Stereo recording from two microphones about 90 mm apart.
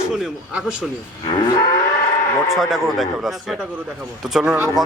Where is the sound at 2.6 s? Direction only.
5° right (ahead or behind).